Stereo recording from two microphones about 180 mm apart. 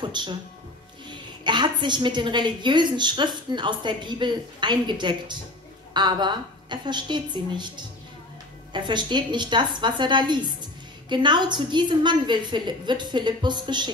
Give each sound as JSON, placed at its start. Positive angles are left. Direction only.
{"t": 0.0, "sound": "a woman's voice", "side_deg": -25}